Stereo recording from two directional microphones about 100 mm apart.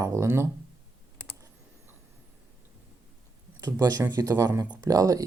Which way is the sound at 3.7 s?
40° right (ahead or behind).